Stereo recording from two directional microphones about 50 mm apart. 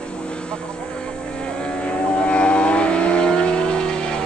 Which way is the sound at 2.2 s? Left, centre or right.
Left.